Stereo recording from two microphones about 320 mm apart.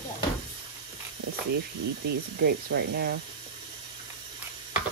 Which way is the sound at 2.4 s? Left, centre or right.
Right.